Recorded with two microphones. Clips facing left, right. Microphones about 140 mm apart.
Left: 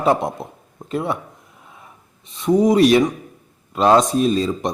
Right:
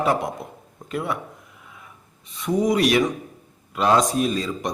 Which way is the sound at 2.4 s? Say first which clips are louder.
Left 6 dB; 25° left (ahead or behind).